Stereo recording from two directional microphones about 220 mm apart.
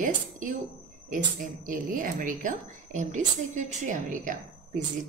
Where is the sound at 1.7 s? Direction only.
40° right (ahead or behind).